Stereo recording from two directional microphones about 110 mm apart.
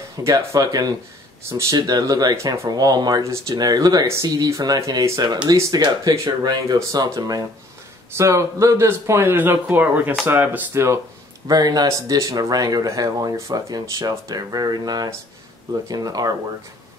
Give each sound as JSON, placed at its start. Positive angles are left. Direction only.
{"t": 0.2, "sound": "speech", "side_deg": -30}
{"t": 11.4, "sound": "speech", "side_deg": -35}